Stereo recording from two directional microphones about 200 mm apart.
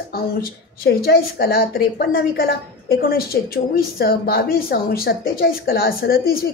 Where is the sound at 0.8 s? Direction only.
50° left (ahead or behind).